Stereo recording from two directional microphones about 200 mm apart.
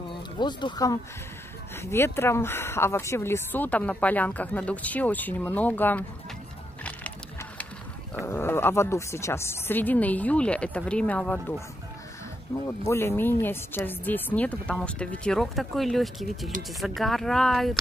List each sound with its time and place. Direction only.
0.1 s a woman's voice: 20° left (ahead or behind)
8.3 s a woman's voice: 10° left (ahead or behind)
12.6 s a woman's voice: 15° left (ahead or behind)